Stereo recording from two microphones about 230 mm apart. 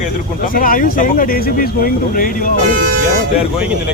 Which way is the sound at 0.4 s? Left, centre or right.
Left.